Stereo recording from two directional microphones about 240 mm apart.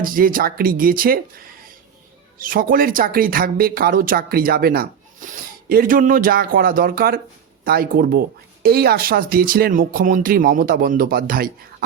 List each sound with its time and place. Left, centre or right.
0.0 s speech: right
2.4 s speech: right